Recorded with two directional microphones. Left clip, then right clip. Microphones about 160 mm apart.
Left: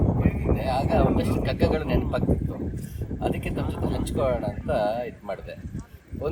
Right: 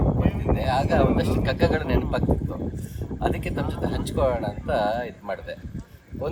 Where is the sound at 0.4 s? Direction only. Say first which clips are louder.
Right 2 dB; 15° right (ahead or behind).